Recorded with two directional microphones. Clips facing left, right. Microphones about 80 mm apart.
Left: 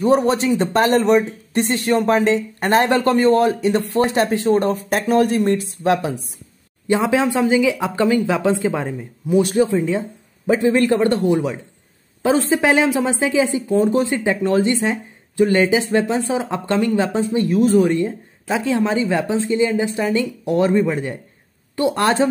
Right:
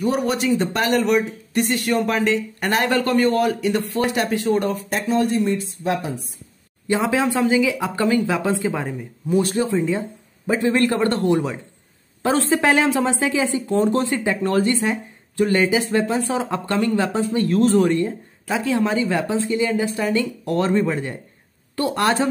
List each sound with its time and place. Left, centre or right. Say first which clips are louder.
0.0 s speech: left 5 dB; left
4.8 s speech: left 4 dB; left
6.9 s a man's voice: left 3 dB; left
17.8 s speech: left 1 dB; left